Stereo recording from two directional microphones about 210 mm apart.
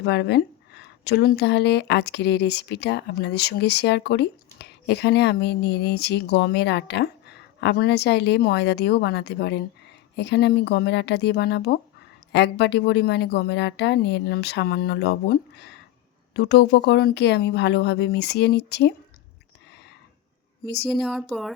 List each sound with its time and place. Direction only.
0.0 s speech: 55° left (ahead or behind)
20.9 s speech: centre (ahead or behind)